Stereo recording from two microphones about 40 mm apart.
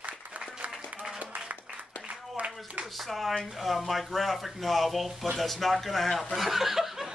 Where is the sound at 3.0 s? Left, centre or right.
Centre.